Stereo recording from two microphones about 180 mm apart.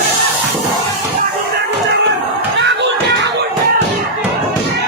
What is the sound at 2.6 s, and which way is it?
Slam, 70° right (ahead or behind).